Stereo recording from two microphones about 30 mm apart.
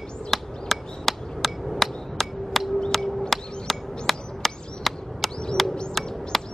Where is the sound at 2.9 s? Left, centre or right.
Centre.